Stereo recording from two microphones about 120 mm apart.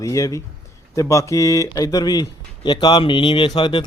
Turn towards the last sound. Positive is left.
turn(degrees=40)  # may be behind; listen again after turning